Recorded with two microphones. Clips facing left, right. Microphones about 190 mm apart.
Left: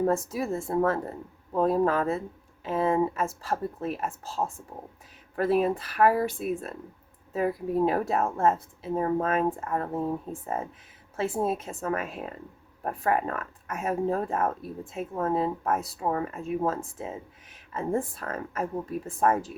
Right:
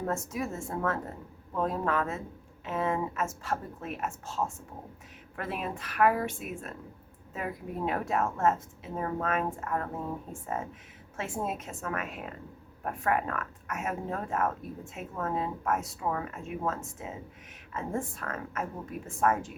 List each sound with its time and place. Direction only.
0.0 s a woman's voice: 35° left (ahead or behind)
11.2 s a woman's voice: 30° left (ahead or behind)